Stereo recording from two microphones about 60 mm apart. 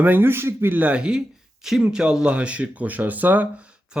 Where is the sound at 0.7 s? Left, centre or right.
Right.